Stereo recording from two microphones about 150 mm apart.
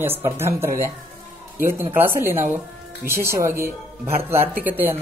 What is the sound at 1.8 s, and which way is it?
Speech, 15° right (ahead or behind).